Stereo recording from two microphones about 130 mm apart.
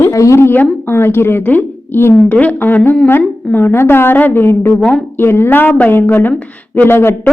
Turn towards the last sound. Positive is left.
turn(degrees=15)  # may be behind; listen again after turning